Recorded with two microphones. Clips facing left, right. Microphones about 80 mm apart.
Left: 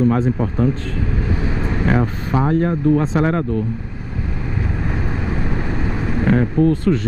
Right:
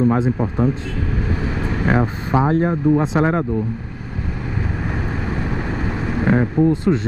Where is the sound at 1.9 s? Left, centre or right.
Right.